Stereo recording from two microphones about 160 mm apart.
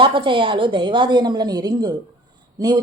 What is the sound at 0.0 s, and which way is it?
A woman's voice, 30° right (ahead or behind).